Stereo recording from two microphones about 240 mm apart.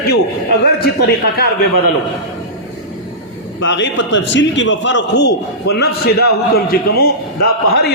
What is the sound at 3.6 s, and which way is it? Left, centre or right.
A man's voice, left.